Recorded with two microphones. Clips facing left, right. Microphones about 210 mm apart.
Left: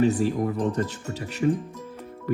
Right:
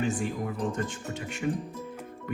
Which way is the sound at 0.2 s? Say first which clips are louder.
Left 7 dB; 40° left (ahead or behind).